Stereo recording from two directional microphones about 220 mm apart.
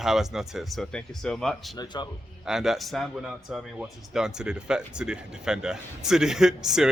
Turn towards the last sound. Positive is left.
turn(degrees=-5)  # may be behind; listen again after turning